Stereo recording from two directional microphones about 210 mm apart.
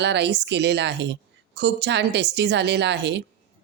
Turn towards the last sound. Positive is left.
turn(degrees=-55)  # may be behind; listen again after turning